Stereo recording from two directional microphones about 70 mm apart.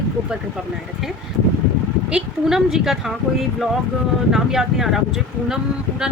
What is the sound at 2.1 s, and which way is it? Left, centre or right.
Speech, centre.